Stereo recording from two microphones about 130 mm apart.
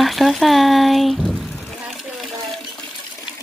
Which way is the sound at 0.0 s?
Centre (ahead or behind).